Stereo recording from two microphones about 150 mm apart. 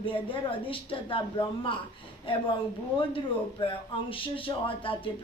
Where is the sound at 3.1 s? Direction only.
35° left (ahead or behind).